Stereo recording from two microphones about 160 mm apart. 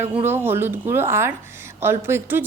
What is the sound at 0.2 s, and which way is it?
A woman's voice, 15° right (ahead or behind).